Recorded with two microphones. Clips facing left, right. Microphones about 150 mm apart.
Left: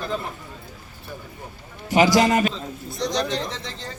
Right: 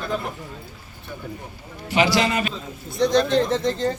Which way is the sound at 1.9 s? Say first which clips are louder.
Left 3 dB; 40° left (ahead or behind).